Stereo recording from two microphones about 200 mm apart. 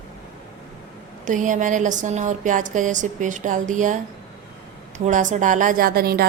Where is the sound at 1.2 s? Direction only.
40° right (ahead or behind).